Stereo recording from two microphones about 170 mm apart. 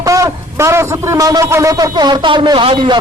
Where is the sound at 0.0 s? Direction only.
20° right (ahead or behind).